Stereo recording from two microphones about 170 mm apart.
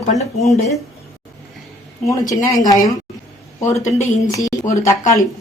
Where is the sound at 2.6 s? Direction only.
20° left (ahead or behind).